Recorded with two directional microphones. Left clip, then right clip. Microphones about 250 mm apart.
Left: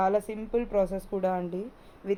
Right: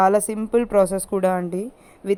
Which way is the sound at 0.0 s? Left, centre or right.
Right.